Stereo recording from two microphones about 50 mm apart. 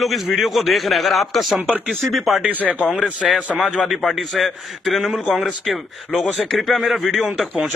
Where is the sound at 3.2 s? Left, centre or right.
Centre.